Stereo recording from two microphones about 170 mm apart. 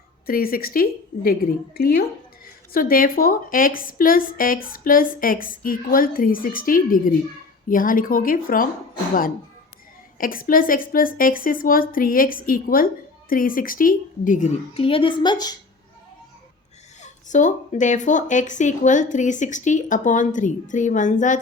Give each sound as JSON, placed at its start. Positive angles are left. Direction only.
{"t": 0.3, "sound": "a woman's voice", "side_deg": 60}
{"t": 10.2, "sound": "a woman's voice", "side_deg": 55}
{"t": 17.0, "sound": "speech", "side_deg": 45}